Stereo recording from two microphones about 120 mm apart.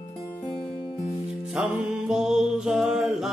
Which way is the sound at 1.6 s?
5° right (ahead or behind).